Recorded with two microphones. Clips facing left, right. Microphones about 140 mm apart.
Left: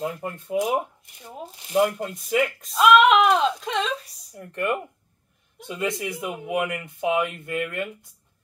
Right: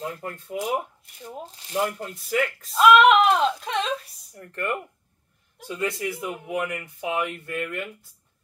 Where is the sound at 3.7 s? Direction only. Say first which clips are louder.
Even; centre (ahead or behind).